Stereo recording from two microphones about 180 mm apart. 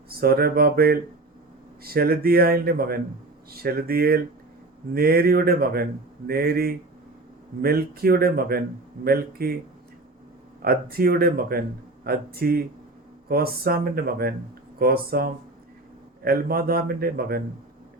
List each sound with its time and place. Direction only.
0.1 s speech: 55° right (ahead or behind)
10.6 s speech: 55° right (ahead or behind)